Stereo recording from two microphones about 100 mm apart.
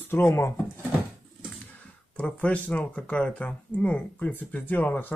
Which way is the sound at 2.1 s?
15° left (ahead or behind).